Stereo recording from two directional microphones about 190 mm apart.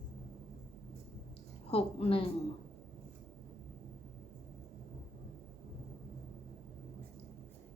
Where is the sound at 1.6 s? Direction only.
30° left (ahead or behind).